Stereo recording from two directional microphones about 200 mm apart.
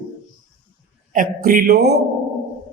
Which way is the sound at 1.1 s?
45° right (ahead or behind).